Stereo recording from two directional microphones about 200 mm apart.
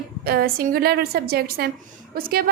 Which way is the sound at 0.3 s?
50° right (ahead or behind).